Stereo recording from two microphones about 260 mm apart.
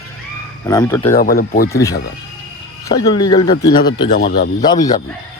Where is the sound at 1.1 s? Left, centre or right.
Left.